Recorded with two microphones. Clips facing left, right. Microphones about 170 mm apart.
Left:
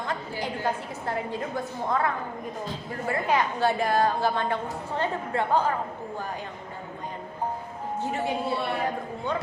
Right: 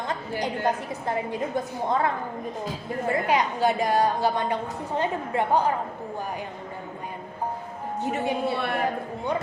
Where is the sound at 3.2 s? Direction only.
15° right (ahead or behind).